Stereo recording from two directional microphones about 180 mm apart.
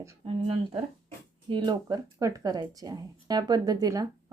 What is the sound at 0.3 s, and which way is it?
Speech, 30° right (ahead or behind).